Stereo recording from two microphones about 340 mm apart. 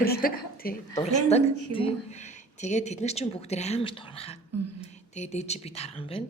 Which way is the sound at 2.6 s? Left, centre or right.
Left.